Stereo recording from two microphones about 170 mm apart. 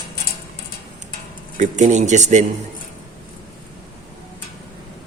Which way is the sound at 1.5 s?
45° right (ahead or behind).